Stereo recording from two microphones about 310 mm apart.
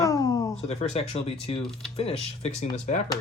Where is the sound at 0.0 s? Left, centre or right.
Centre.